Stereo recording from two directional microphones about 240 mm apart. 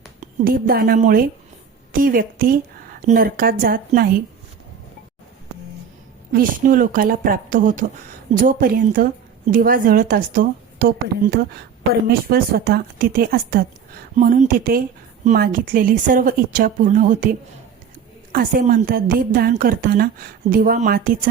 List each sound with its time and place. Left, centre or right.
0.4 s a woman's voice: right
6.3 s a woman's voice: right
18.3 s a woman's voice: right